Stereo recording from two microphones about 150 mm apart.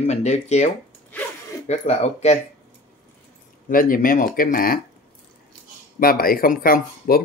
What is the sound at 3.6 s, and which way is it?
Speech, 70° left (ahead or behind).